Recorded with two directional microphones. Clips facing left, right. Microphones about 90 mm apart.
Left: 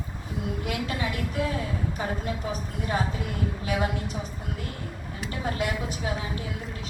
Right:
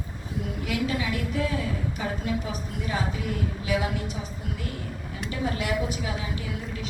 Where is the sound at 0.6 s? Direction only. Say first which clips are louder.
Right 4 dB; 40° left (ahead or behind).